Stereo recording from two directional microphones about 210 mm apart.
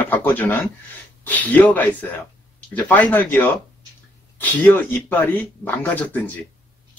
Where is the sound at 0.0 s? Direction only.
10° left (ahead or behind).